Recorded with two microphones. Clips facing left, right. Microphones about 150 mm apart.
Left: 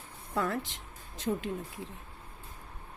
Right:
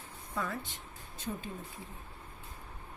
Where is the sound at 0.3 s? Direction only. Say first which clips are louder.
Left 6 dB; 80° left.